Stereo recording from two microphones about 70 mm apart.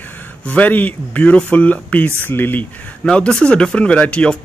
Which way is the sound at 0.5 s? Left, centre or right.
Left.